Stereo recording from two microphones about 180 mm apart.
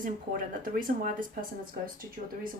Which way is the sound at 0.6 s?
50° right (ahead or behind).